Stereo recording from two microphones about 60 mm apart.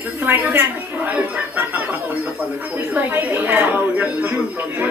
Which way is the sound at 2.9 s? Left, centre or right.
Right.